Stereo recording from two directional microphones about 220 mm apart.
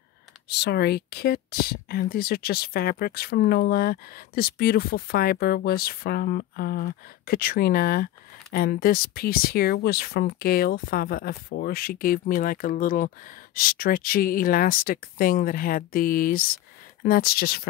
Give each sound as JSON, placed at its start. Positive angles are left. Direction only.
{"t": 0.5, "sound": "speech", "side_deg": 50}